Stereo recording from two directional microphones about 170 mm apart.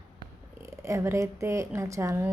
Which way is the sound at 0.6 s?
15° right (ahead or behind).